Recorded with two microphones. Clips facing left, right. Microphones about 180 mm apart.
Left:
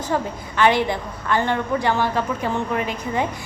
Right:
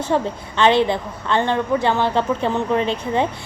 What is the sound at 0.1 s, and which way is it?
A woman's voice, 25° right (ahead or behind).